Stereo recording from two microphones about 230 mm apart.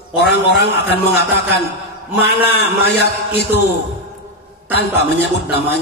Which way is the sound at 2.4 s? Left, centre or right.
Left.